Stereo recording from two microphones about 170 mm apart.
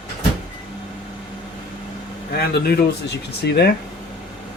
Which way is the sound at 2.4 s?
65° left (ahead or behind).